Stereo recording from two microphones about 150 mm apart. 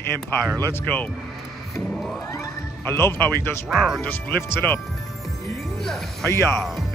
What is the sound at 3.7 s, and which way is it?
Speech, centre (ahead or behind).